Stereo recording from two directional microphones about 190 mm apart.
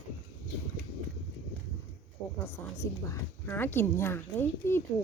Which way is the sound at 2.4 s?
15° left (ahead or behind).